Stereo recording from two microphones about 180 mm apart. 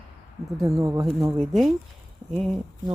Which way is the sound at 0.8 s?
15° right (ahead or behind).